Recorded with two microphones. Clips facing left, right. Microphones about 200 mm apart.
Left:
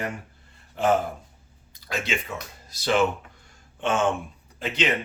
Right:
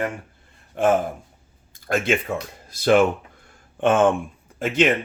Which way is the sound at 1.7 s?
50° right (ahead or behind).